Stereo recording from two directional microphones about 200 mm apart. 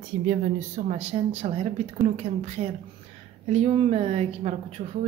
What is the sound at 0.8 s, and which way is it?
Speech, 30° right (ahead or behind).